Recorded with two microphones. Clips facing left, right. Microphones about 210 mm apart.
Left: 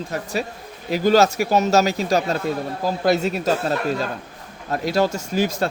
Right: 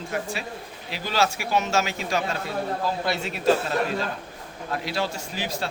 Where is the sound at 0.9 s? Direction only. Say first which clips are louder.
Left 10 dB; 45° left (ahead or behind).